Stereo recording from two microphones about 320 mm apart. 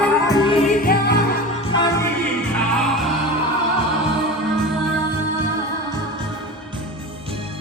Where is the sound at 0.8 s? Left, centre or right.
Left.